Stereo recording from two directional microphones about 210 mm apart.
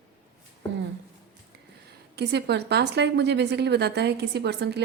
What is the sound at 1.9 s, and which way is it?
A woman's voice, 50° right (ahead or behind).